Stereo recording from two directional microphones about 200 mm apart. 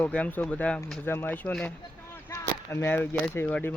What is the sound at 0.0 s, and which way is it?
Speech, 5° left (ahead or behind).